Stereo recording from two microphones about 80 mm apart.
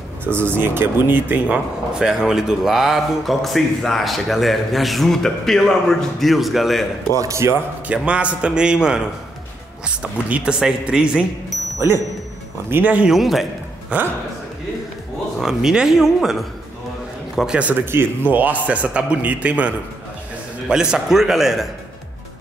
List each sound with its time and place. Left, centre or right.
0.2 s a man's voice: right
2.0 s speech: centre
7.2 s a man's voice: right
7.9 s speech: centre
12.6 s a man's voice: right
13.0 s speech: centre
13.9 s speech: centre
15.3 s a man's voice: centre